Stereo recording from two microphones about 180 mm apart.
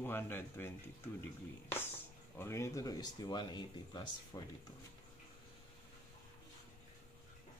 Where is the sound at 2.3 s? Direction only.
15° left (ahead or behind).